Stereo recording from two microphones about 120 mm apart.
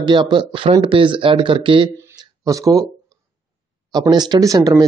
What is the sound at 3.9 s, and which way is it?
Speech, 35° right (ahead or behind).